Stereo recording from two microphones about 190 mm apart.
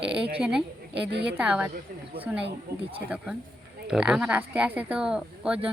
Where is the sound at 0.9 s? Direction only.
65° right (ahead or behind).